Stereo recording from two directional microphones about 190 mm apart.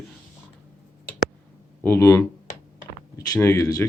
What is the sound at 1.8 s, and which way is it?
Speech, 15° left (ahead or behind).